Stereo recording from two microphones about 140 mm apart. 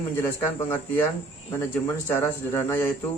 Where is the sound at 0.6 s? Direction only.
15° left (ahead or behind).